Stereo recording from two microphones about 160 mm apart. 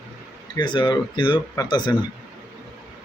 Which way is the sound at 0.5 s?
30° left (ahead or behind).